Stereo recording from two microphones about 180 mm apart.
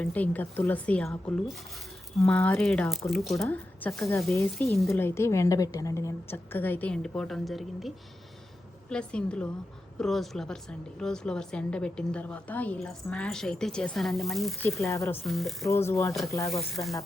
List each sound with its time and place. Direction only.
0.0 s a woman's voice: 10° left (ahead or behind)
2.1 s a woman's voice: 5° left (ahead or behind)
14.7 s a woman's voice: 15° left (ahead or behind)
15.3 s a woman's voice: centre (ahead or behind)
15.6 s a woman's voice: 15° left (ahead or behind)
16.5 s a woman's voice: centre (ahead or behind)